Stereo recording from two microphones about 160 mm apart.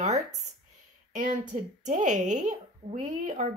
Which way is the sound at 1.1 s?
55° right (ahead or behind).